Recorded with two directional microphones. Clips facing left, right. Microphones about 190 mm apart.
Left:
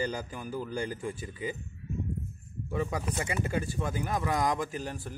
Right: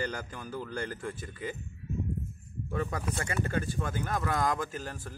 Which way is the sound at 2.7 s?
10° left (ahead or behind).